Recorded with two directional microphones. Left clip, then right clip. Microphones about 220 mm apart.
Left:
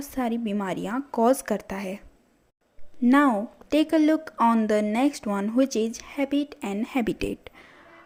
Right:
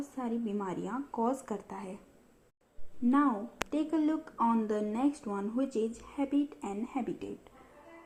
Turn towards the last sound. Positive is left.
turn(degrees=55)  # may be behind; listen again after turning